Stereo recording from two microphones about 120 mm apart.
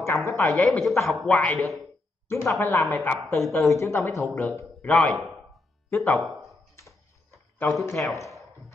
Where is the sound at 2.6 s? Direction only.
15° left (ahead or behind).